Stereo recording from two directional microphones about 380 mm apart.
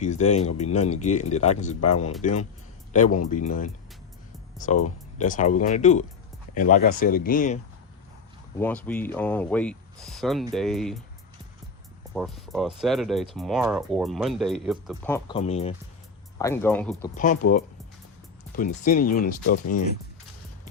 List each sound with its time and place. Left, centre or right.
0.0 s speech: centre
1.8 s speech: left
2.2 s a man's voice: centre
8.5 s speech: centre
12.1 s speech: centre
17.2 s speech: left